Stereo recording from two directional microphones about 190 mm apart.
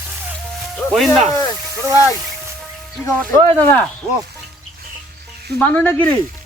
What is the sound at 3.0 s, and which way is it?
Speech, 10° left (ahead or behind).